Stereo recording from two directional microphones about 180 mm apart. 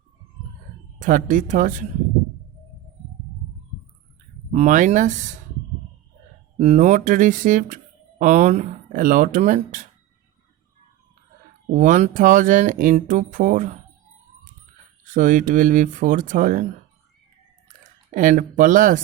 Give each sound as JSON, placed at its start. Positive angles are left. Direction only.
{"t": 1.0, "sound": "speech", "side_deg": -45}
{"t": 4.5, "sound": "speech", "side_deg": -45}
{"t": 6.6, "sound": "speech", "side_deg": -40}
{"t": 11.7, "sound": "speech", "side_deg": -45}
{"t": 15.0, "sound": "speech", "side_deg": -45}
{"t": 18.1, "sound": "speech", "side_deg": -45}